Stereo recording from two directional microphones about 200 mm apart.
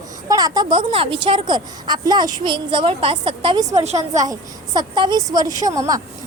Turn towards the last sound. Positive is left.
turn(degrees=-15)  # may be behind; listen again after turning